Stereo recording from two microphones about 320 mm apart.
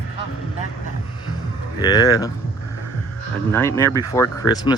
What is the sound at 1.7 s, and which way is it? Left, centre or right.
Speech, centre.